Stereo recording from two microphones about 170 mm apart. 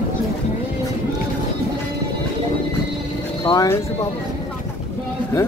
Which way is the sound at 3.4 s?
20° left (ahead or behind).